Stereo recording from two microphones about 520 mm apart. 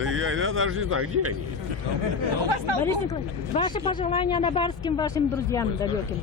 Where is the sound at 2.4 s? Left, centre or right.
Right.